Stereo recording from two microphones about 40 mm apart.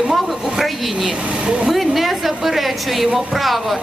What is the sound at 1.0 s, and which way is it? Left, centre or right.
Vehicle, right.